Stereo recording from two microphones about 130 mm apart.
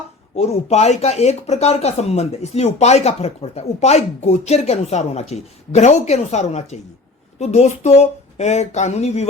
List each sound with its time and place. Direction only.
0.3 s speech: 55° left (ahead or behind)